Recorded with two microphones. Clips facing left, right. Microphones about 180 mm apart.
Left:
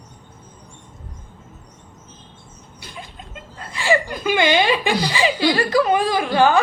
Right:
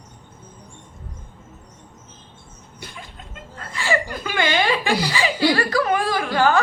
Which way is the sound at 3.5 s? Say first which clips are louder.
Left 3 dB; 20° left (ahead or behind).